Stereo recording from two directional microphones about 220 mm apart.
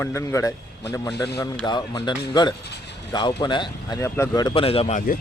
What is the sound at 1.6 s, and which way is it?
Speech, 20° left (ahead or behind).